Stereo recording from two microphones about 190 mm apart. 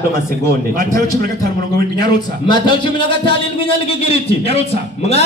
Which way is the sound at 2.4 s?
25° left (ahead or behind).